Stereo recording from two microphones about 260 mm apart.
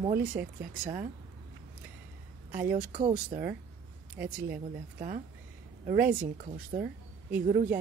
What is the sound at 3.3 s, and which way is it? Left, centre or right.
Speech, right.